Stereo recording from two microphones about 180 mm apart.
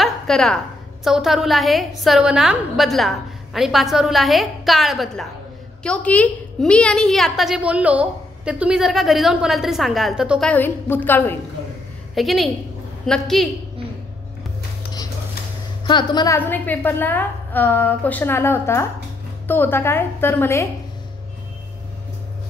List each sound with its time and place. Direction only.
0.0 s a sound: 5° left (ahead or behind)
1.0 s a woman's voice: centre (ahead or behind)
10.5 s a woman's voice: 10° left (ahead or behind)
12.2 s a woman's voice: centre (ahead or behind)
15.8 s a woman's voice: 25° left (ahead or behind)
16.3 s a woman's voice: 10° left (ahead or behind)